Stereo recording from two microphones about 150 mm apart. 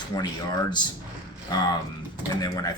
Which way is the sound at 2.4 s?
25° left (ahead or behind).